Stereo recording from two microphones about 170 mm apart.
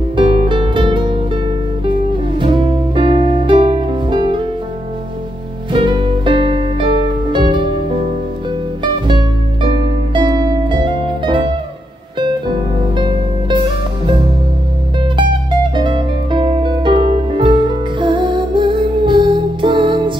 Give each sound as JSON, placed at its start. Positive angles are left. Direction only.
{"t": 0.1, "sound": "music", "side_deg": -30}
{"t": 5.7, "sound": "music", "side_deg": -30}
{"t": 15.7, "sound": "music", "side_deg": -30}